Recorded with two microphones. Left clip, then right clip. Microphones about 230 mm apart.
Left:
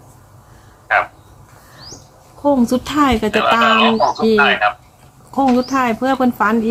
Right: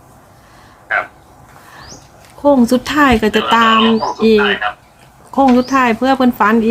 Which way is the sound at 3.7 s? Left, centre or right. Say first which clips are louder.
Even; left.